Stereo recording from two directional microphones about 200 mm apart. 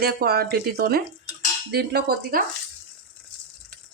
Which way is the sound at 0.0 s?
50° right (ahead or behind).